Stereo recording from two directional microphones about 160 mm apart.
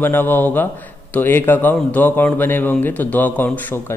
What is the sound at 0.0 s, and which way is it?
Speech, 10° left (ahead or behind).